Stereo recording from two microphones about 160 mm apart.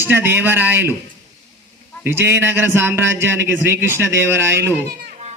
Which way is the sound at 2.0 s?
15° right (ahead or behind).